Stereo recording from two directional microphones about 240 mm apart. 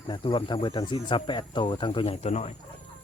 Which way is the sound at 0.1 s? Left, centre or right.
Left.